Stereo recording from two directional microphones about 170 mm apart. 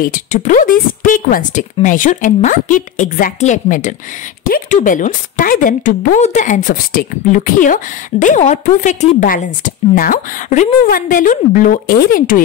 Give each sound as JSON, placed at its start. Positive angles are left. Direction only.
{"t": 0.0, "sound": "a woman's voice", "side_deg": 50}